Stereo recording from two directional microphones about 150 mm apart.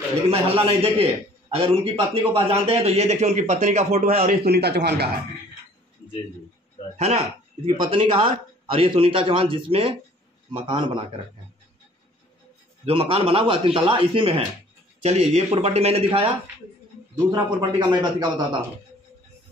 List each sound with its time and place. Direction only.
0.3 s a man's voice: 40° right (ahead or behind)
4.5 s speech: 90° right
7.0 s a man's voice: 45° right (ahead or behind)
12.8 s a man's voice: 40° right (ahead or behind)
15.0 s a man's voice: 45° right (ahead or behind)
17.6 s a man's voice: 30° right (ahead or behind)